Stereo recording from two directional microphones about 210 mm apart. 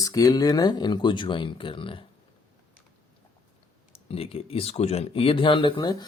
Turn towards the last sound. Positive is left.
turn(degrees=20)  # may be behind; listen again after turning